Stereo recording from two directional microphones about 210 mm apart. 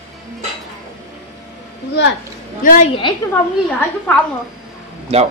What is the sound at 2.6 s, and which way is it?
Speech, 40° left (ahead or behind).